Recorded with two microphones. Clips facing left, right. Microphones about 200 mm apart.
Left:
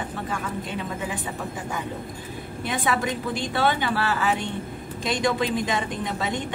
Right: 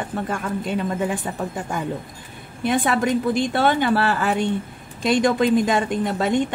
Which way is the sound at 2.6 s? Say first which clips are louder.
Right 6 dB; 50° right (ahead or behind).